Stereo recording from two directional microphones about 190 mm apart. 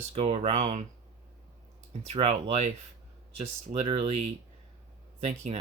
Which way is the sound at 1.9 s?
30° right (ahead or behind).